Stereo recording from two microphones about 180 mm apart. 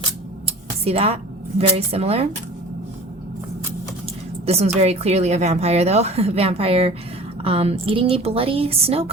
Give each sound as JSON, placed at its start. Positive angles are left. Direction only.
{"t": 0.4, "sound": "a woman's voice", "side_deg": -35}
{"t": 4.4, "sound": "a woman's voice", "side_deg": -35}